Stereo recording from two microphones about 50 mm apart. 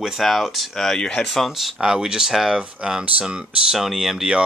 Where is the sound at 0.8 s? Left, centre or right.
Centre.